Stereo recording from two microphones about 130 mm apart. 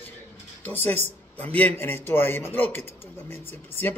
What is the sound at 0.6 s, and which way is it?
Speech, 15° left (ahead or behind).